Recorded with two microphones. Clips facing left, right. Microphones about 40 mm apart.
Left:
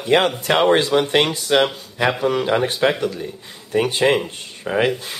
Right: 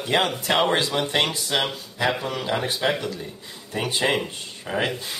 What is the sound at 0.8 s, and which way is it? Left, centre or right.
Speech, left.